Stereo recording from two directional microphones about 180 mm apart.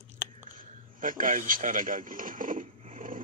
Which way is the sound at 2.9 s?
50° right (ahead or behind).